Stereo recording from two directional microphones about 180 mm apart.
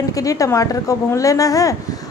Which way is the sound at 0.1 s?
20° left (ahead or behind).